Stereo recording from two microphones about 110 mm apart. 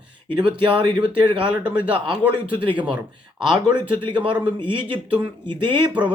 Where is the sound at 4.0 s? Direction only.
50° right (ahead or behind).